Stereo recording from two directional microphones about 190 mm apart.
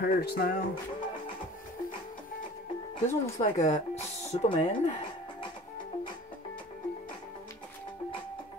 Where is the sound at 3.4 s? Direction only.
40° left (ahead or behind).